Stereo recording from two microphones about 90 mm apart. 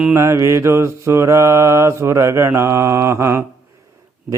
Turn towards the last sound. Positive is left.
turn(degrees=-30)  # may be behind; listen again after turning